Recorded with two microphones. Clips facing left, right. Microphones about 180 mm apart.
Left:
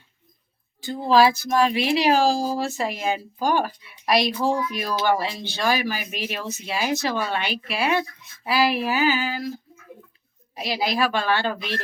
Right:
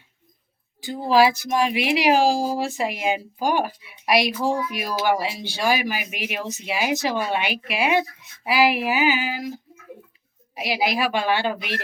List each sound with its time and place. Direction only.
0.8 s speech: 15° right (ahead or behind)